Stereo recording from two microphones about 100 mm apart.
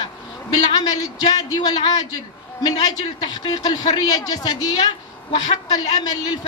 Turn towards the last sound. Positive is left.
turn(degrees=40)  # may be behind; listen again after turning